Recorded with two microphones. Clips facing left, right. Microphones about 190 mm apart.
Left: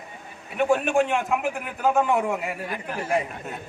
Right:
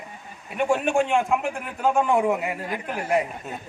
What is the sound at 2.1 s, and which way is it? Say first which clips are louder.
Speech: right 3 dB; 25° right (ahead or behind).